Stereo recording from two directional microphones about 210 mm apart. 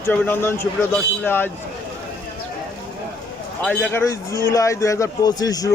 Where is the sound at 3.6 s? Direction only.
10° left (ahead or behind).